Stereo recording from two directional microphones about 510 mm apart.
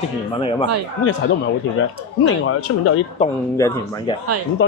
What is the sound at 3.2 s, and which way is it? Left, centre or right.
Speech, centre.